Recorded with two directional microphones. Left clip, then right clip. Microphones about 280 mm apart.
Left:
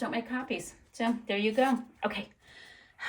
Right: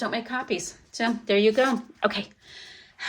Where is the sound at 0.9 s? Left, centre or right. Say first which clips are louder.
Right 8 dB; centre.